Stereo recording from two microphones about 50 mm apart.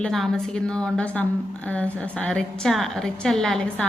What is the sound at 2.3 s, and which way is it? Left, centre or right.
Speech, centre.